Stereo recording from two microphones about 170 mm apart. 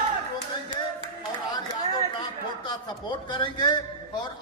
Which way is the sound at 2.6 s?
25° left (ahead or behind).